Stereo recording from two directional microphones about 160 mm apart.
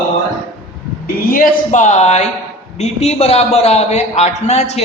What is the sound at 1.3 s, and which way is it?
A man's voice, 55° left (ahead or behind).